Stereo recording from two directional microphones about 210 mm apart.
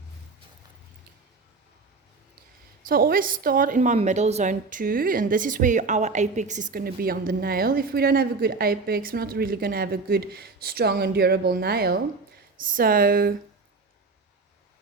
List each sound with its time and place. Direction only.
2.8 s a woman's voice: 45° right (ahead or behind)